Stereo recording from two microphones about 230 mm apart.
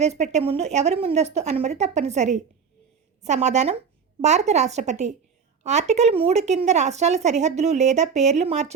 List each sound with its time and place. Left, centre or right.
0.0 s a woman's voice: right